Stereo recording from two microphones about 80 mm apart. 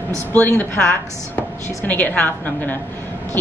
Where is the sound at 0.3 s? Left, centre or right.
Left.